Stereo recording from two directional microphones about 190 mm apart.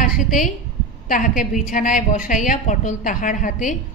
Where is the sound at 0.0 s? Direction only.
45° left (ahead or behind).